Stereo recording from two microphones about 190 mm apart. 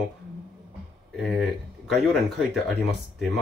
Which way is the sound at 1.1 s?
Centre (ahead or behind).